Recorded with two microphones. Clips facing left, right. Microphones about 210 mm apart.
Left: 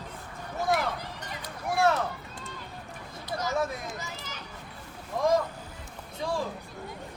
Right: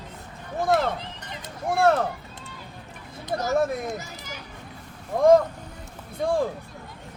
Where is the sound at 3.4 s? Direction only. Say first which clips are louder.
Right 6 dB; 50° right (ahead or behind).